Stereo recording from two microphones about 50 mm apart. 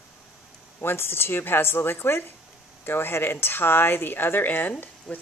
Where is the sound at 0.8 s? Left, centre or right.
Left.